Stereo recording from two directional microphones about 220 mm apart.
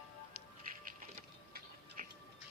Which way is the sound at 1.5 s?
35° right (ahead or behind).